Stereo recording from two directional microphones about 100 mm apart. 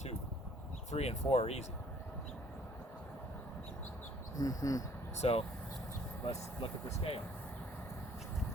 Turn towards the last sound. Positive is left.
turn(degrees=70)  # may be behind; listen again after turning